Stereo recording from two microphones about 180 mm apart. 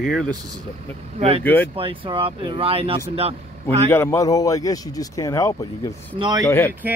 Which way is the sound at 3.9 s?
15° left (ahead or behind).